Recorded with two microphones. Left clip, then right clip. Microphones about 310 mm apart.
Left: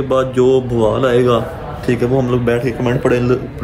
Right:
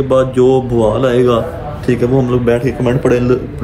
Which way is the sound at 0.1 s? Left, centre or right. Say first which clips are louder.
Right 2 dB; centre.